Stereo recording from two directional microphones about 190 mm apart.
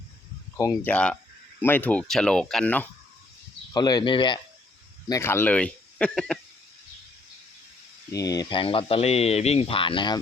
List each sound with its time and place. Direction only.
0.5 s speech: 15° left (ahead or behind)
3.7 s speech: 20° left (ahead or behind)
5.0 s speech: 15° left (ahead or behind)
8.1 s speech: 20° left (ahead or behind)